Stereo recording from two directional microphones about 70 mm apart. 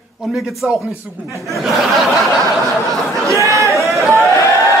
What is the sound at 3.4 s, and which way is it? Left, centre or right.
Speech, right.